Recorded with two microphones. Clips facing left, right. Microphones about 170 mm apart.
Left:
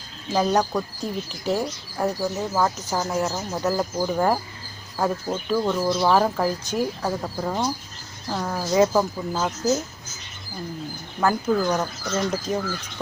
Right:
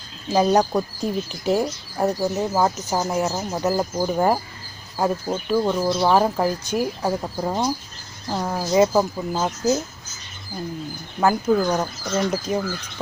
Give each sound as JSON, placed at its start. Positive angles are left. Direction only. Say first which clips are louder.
{"t": 0.3, "sound": "speech", "louder": "right 3 dB", "side_deg": -25}
{"t": 1.5, "sound": "speech", "louder": "right 3 dB", "side_deg": -15}
{"t": 11.2, "sound": "speech", "louder": "right 3 dB", "side_deg": -15}